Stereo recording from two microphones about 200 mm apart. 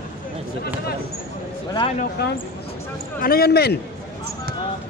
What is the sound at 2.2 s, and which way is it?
A man's voice, 55° left (ahead or behind).